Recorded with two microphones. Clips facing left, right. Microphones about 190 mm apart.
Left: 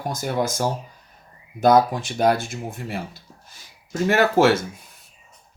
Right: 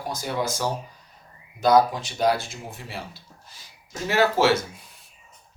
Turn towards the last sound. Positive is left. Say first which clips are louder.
# left 3 dB
turn(degrees=50)  # may be behind; listen again after turning